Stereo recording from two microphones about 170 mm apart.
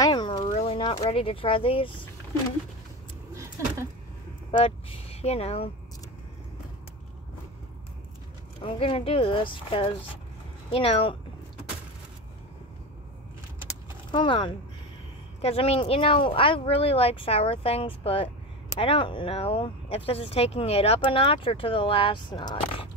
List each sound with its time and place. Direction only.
0.0 s a sound: 25° left (ahead or behind)
0.5 s speech: 35° left (ahead or behind)
4.5 s speech: 35° left (ahead or behind)
8.5 s speech: 30° left (ahead or behind)
14.1 s speech: 30° left (ahead or behind)